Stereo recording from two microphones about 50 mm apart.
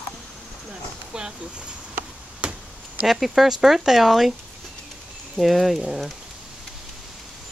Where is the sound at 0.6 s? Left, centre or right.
Centre.